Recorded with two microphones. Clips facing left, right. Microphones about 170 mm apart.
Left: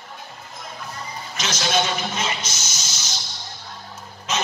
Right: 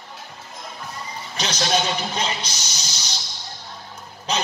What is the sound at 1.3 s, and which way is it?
Music, 35° right (ahead or behind).